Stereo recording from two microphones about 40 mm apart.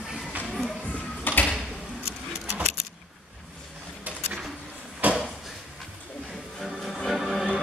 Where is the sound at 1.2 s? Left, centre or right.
Left.